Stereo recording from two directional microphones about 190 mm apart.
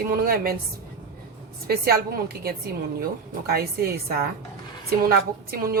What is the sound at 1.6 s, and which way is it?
A woman's voice, 55° right (ahead or behind).